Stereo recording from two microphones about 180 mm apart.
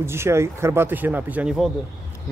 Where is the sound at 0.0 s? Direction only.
15° right (ahead or behind).